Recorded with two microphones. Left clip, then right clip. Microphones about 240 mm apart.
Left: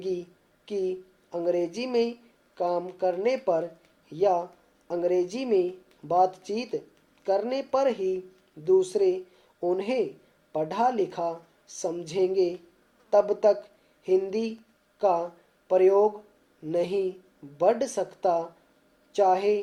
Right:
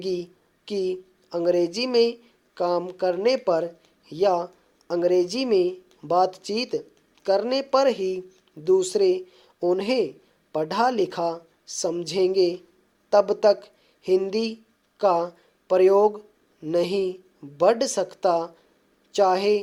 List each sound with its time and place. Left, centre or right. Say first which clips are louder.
0.0 s speech: right 3 dB; right